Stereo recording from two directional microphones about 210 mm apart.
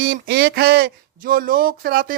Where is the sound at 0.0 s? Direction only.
45° right (ahead or behind).